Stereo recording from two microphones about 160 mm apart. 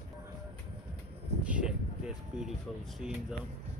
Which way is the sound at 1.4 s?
5° right (ahead or behind).